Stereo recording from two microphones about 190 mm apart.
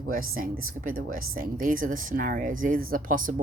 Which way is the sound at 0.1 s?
50° right (ahead or behind).